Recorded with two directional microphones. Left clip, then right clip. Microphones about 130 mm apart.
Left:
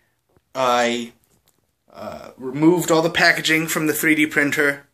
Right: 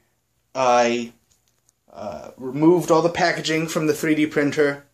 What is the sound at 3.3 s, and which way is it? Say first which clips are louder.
Speech: left 5 dB; 20° right (ahead or behind).